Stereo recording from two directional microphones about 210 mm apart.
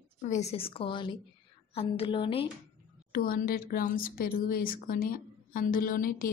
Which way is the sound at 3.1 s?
45° left (ahead or behind).